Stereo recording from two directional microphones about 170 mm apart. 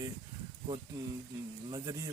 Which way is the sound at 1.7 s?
20° right (ahead or behind).